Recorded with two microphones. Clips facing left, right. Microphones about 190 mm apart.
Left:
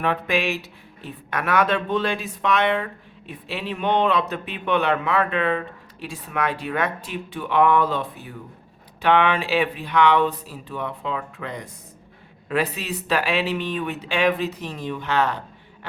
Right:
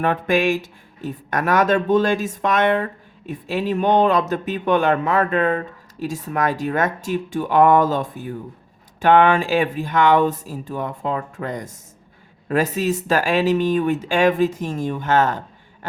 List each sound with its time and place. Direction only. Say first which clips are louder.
0.0 s speech: right 4 dB; 45° right (ahead or behind)